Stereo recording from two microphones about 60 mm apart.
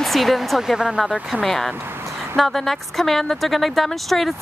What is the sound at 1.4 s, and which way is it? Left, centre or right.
Speech, centre.